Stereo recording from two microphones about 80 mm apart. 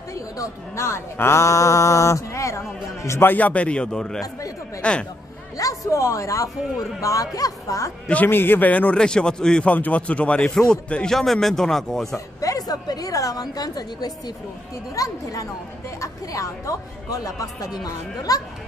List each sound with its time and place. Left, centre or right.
0.1 s a man's voice: left; by 5.0 s centre
5.6 s speech: left
8.1 s a man's voice: left; by 12.2 s centre
12.4 s speech: left